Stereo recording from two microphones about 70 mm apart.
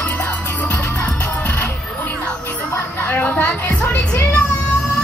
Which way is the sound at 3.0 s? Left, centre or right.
Left.